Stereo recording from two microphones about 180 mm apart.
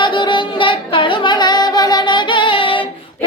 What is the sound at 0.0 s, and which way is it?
Child singing, 25° left (ahead or behind).